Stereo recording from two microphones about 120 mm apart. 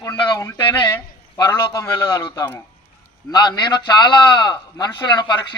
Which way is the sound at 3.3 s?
35° left (ahead or behind).